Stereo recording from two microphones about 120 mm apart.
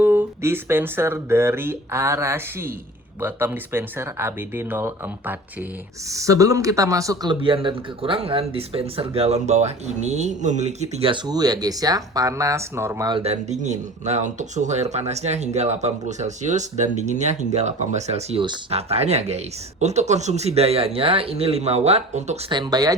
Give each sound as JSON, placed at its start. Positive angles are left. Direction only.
{"t": 0.0, "sound": "speech", "side_deg": -20}
{"t": 6.1, "sound": "speech", "side_deg": -25}
{"t": 11.1, "sound": "speech", "side_deg": -35}
{"t": 13.2, "sound": "speech", "side_deg": -70}
{"t": 22.4, "sound": "speech", "side_deg": -40}